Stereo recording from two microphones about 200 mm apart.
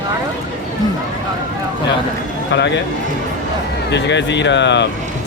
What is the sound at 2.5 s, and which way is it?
Speech, 60° left (ahead or behind).